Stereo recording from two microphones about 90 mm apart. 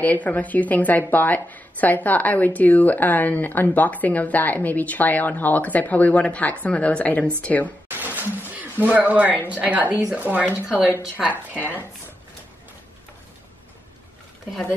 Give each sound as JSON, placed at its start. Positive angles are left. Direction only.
{"t": 0.0, "sound": "speech", "side_deg": 15}
{"t": 7.9, "sound": "a sound", "side_deg": -20}
{"t": 9.5, "sound": "a woman's voice", "side_deg": -15}
{"t": 10.5, "sound": "speech", "side_deg": 25}
{"t": 11.1, "sound": "a woman's voice", "side_deg": -15}